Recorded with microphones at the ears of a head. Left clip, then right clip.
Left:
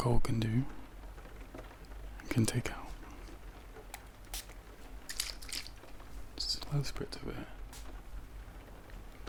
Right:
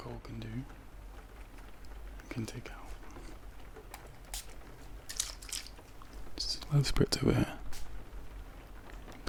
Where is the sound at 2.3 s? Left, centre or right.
Left.